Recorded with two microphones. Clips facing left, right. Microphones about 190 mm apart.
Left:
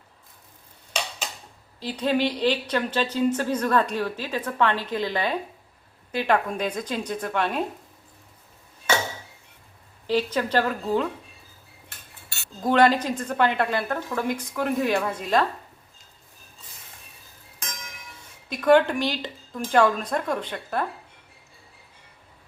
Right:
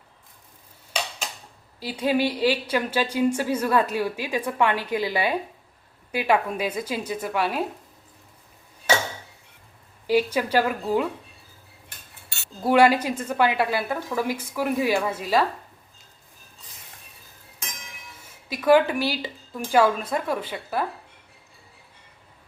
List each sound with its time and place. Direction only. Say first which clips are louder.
1.8 s speech: right 1 dB; 10° right (ahead or behind)
10.1 s speech: right 2 dB; 10° right (ahead or behind)
12.6 s speech: right 1 dB; 10° right (ahead or behind)
18.4 s speech: even; 5° right (ahead or behind)